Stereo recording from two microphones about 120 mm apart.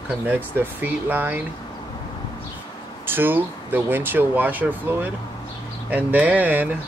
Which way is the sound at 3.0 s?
15° right (ahead or behind).